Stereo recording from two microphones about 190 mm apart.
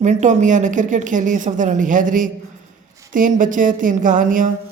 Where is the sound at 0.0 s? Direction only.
40° right (ahead or behind).